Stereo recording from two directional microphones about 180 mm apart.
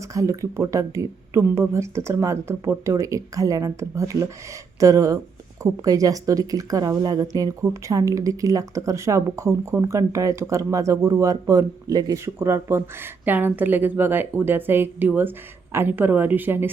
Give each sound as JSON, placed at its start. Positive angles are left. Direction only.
{"t": 0.1, "sound": "speech", "side_deg": -15}